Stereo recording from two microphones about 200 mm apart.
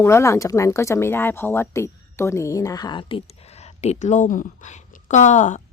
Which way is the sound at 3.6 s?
35° left (ahead or behind).